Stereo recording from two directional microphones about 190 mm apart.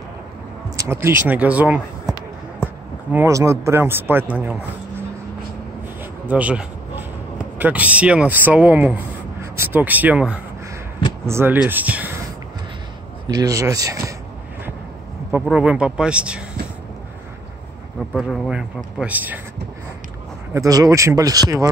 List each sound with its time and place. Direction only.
0.7 s speech: 15° right (ahead or behind)
6.2 s a man's voice: 5° right (ahead or behind)
13.3 s speech: 20° right (ahead or behind)
15.4 s a man's voice: 5° right (ahead or behind)
18.1 s a man's voice: centre (ahead or behind)
20.5 s speech: 20° right (ahead or behind)